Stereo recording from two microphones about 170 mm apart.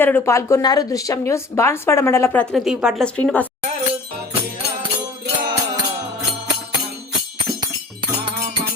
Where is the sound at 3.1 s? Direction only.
10° left (ahead or behind).